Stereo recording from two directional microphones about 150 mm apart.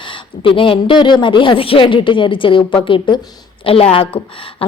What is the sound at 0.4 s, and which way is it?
A woman's voice, 35° left (ahead or behind).